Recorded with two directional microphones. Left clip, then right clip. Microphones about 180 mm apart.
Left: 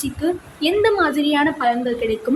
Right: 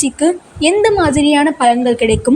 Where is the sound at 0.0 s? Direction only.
30° right (ahead or behind).